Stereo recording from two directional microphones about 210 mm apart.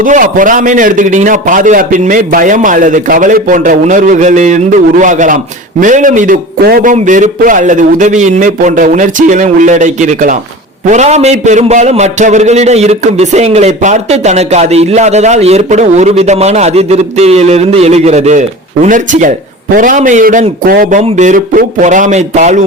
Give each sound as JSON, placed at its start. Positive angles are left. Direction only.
{"t": 0.0, "sound": "a man's voice", "side_deg": -40}